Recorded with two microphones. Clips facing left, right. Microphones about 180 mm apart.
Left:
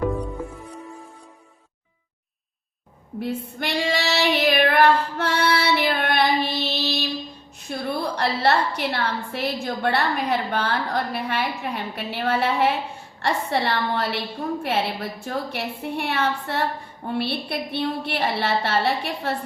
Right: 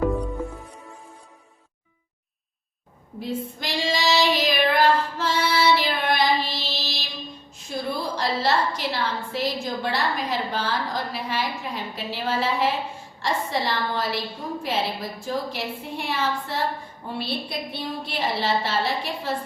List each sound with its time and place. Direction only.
0.1 s music: centre (ahead or behind)
3.2 s child singing: 65° left (ahead or behind)
7.7 s a woman's voice: 60° left (ahead or behind)
15.2 s a woman's voice: 60° left (ahead or behind)